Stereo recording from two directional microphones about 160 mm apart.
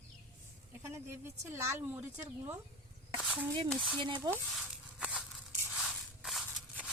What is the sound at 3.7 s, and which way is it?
Stir, 5° left (ahead or behind).